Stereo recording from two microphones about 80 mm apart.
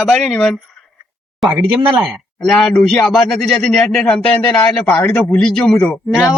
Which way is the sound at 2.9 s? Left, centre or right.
Centre.